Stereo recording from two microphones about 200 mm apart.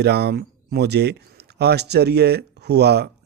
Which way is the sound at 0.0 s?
55° right (ahead or behind).